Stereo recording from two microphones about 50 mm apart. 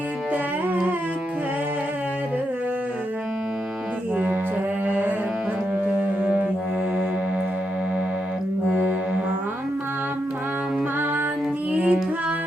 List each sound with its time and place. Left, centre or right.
4.9 s music: right
8.7 s music: right
11.7 s music: right